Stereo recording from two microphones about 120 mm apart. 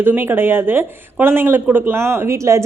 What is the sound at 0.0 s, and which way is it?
Speech, 20° right (ahead or behind).